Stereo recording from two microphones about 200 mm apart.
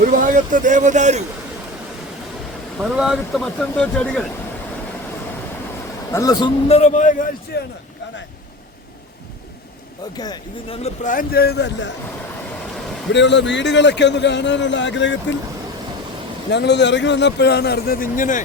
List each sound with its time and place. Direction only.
0.0 s speech: 40° right (ahead or behind)
2.7 s speech: centre (ahead or behind)
6.1 s speech: 20° left (ahead or behind)
6.7 s a man's voice: 35° left (ahead or behind)
10.2 s speech: 20° left (ahead or behind)
10.8 s speech: 40° left (ahead or behind); by 11.9 s 60° left (ahead or behind)
13.1 s a man's voice: 60° left (ahead or behind)
16.5 s a man's voice: 60° left (ahead or behind); by 18.4 s 40° left (ahead or behind)